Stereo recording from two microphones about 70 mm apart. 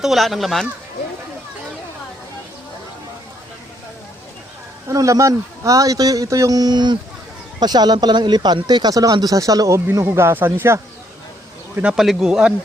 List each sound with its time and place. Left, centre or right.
0.0 s speech: centre
4.9 s speech: right
9.9 s speech: right
11.9 s speech: centre